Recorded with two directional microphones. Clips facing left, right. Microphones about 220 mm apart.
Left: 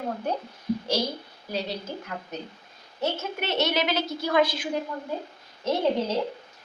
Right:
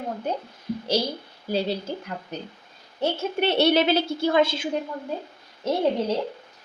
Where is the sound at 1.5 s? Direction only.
30° right (ahead or behind).